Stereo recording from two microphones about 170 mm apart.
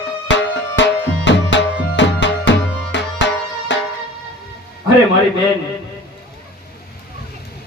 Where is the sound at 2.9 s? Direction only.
90° left.